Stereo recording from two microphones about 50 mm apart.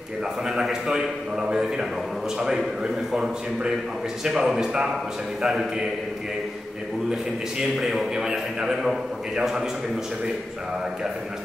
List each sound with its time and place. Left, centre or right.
0.5 s a man's voice: centre
7.7 s a man's voice: centre